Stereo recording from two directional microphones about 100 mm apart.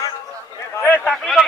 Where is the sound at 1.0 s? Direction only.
Centre (ahead or behind).